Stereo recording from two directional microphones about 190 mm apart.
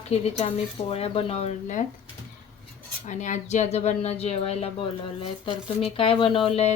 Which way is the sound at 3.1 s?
40° left (ahead or behind).